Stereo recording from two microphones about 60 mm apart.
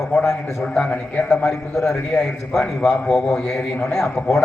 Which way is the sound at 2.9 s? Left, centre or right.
Centre.